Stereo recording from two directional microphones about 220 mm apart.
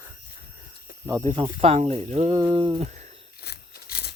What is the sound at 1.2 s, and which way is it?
Speech, 25° right (ahead or behind).